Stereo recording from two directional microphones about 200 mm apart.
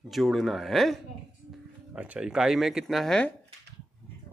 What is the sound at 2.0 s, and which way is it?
Speech, 5° right (ahead or behind).